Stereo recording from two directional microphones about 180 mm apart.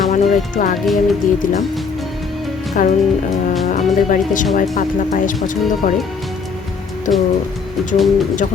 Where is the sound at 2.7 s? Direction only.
45° left (ahead or behind).